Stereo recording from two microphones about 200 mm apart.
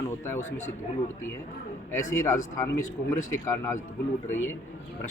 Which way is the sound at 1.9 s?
15° left (ahead or behind).